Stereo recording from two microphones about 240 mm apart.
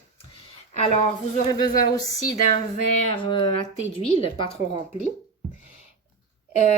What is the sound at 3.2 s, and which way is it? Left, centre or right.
A woman's voice, left.